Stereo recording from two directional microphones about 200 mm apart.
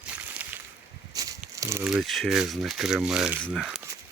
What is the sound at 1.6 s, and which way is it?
Speech, 15° right (ahead or behind).